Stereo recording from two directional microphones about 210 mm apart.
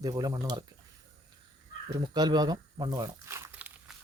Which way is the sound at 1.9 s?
20° right (ahead or behind).